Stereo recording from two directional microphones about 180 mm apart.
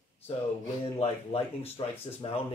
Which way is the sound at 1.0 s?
30° left (ahead or behind).